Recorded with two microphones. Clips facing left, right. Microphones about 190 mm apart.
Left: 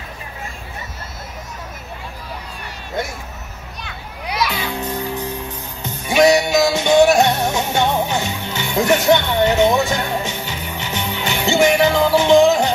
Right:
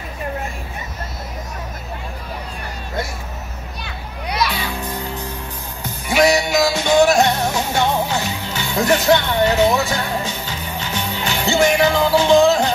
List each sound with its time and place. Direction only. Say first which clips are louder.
4.3 s music: even; centre (ahead or behind)
6.0 s music: left 2 dB; 20° left (ahead or behind)